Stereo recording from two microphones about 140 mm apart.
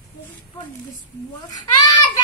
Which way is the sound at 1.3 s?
30° left (ahead or behind).